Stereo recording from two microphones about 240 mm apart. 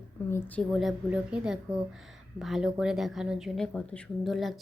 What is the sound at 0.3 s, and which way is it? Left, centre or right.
Speech, centre.